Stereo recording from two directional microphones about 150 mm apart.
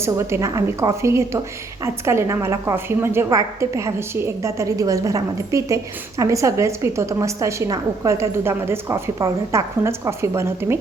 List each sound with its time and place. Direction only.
0.0 s a woman's voice: 20° right (ahead or behind)